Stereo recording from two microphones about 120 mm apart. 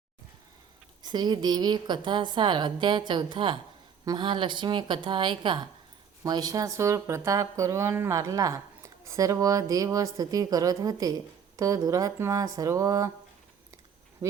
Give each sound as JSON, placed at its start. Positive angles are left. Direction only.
{"t": 1.0, "sound": "a woman's voice", "side_deg": -35}
{"t": 14.2, "sound": "speech", "side_deg": -30}